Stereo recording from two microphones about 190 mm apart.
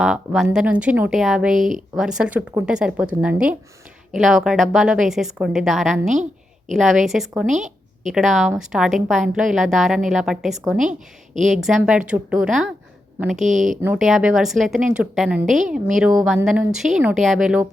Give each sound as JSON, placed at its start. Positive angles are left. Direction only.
{"t": 0.0, "sound": "speech", "side_deg": 0}
{"t": 7.4, "sound": "speech", "side_deg": -40}
{"t": 8.0, "sound": "speech", "side_deg": 0}
{"t": 13.4, "sound": "speech", "side_deg": -40}
{"t": 13.8, "sound": "speech", "side_deg": -5}